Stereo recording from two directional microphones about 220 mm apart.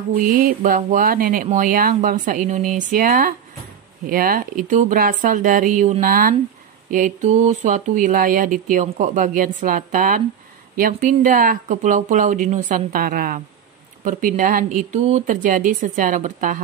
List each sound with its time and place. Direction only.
0.1 s speech: 40° right (ahead or behind)